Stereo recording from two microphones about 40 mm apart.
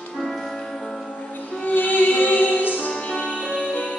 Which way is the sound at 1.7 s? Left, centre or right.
Left.